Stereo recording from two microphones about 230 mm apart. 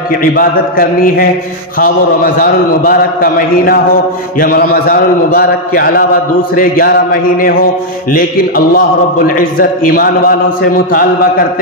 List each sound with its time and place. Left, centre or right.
0.2 s a man's voice: left